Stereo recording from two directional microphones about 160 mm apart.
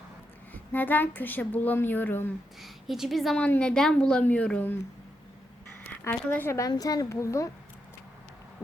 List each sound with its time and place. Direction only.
0.5 s a woman's voice: 10° left (ahead or behind)
2.6 s a woman's voice: centre (ahead or behind)
6.1 s a woman's voice: 15° left (ahead or behind)